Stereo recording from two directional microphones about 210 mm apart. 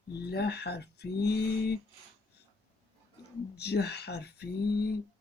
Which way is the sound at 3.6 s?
50° left (ahead or behind).